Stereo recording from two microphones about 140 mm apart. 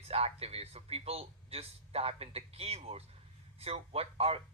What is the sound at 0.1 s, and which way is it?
Speech, 45° right (ahead or behind).